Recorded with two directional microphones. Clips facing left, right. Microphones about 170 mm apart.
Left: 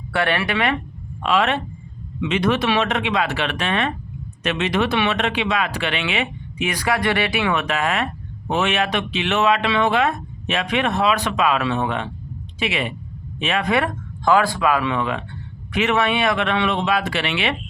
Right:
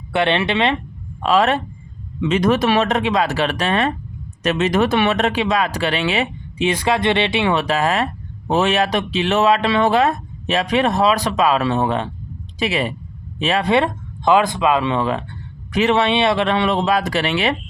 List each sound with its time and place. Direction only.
0.1 s speech: 20° right (ahead or behind)
1.2 s a man's voice: 40° right (ahead or behind)